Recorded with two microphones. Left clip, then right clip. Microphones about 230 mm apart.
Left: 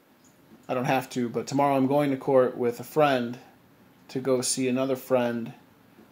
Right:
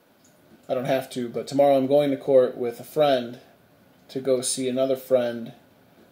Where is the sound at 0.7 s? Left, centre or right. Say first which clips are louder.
Right 2 dB; left.